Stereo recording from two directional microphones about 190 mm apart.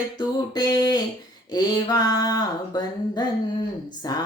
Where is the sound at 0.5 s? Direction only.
20° left (ahead or behind).